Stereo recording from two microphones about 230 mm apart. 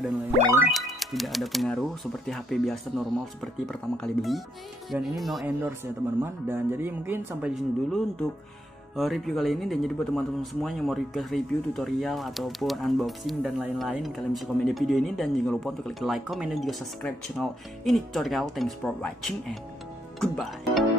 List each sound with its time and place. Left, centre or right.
0.7 s speech: centre
20.2 s music: centre